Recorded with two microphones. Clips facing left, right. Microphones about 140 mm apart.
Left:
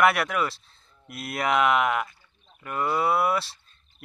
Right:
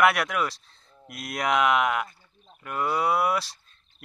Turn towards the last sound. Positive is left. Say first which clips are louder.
# left 1 dB
turn(degrees=0)  # may be behind; listen again after turning